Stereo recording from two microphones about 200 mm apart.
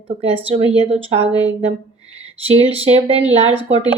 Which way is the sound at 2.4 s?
30° right (ahead or behind).